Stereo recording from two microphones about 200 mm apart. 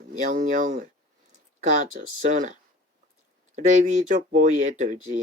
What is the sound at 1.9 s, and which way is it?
Speech, 40° right (ahead or behind).